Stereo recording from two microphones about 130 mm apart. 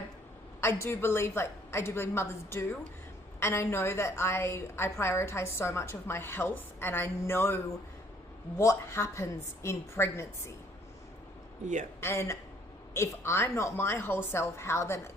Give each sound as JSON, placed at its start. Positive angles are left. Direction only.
{"t": 0.6, "sound": "a woman's voice", "side_deg": 20}
{"t": 11.9, "sound": "a woman's voice", "side_deg": 20}